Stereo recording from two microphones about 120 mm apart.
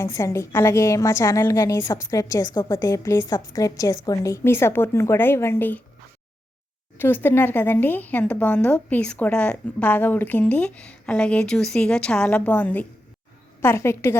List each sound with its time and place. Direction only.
0.0 s a woman's voice: 25° left (ahead or behind)
7.0 s a woman's voice: 15° left (ahead or behind)